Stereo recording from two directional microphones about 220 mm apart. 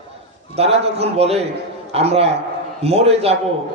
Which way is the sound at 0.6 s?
30° right (ahead or behind).